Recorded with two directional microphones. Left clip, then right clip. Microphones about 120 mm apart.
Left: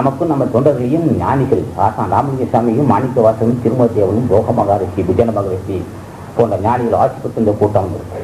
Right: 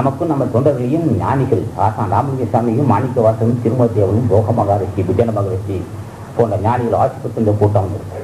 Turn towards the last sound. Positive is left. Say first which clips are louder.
# left 2 dB
turn(degrees=25)  # may be behind; listen again after turning